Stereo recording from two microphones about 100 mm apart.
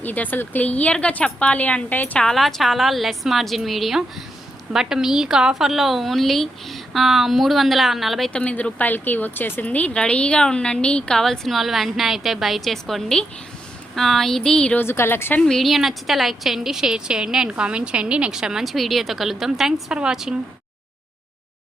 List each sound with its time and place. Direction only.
0.0 s speech: 15° left (ahead or behind)
2.2 s a woman's voice: centre (ahead or behind)
8.3 s a woman's voice: 10° left (ahead or behind)
14.8 s a woman's voice: 25° left (ahead or behind)
15.4 s a woman's voice: 5° left (ahead or behind)